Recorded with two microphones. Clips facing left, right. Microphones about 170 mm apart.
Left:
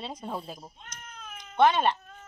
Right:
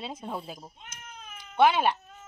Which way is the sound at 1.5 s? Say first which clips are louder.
Even; 5° right (ahead or behind).